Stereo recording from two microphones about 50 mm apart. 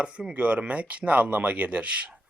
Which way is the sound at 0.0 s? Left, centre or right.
Centre.